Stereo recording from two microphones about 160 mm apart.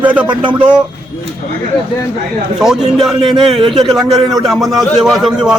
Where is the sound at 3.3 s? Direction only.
30° right (ahead or behind).